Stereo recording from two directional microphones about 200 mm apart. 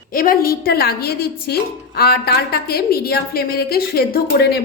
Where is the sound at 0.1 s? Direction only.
45° left (ahead or behind).